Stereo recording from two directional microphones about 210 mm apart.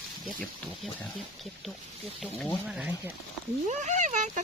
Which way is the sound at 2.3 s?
Centre (ahead or behind).